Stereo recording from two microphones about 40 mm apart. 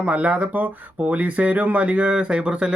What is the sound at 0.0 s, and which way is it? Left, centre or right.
Speech, right.